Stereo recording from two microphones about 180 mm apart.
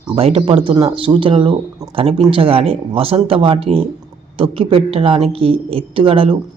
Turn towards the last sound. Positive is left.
turn(degrees=-30)  # may be behind; listen again after turning